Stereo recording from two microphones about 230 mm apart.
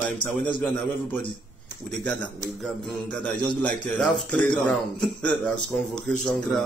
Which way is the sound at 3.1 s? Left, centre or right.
Centre.